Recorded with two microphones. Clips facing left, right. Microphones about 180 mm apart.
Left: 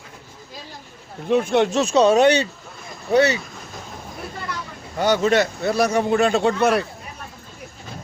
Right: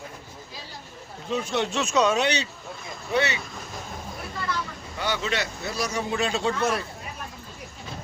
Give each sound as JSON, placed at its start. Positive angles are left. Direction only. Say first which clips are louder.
{"t": 1.3, "sound": "speech", "louder": "left 9 dB", "side_deg": 55}
{"t": 1.8, "sound": "speech", "louder": "left 5 dB", "side_deg": 35}
{"t": 2.1, "sound": "speech", "louder": "left 10 dB", "side_deg": 50}
{"t": 3.1, "sound": "speech", "louder": "left 8 dB", "side_deg": 40}
{"t": 4.9, "sound": "speech", "louder": "left 10 dB", "side_deg": 45}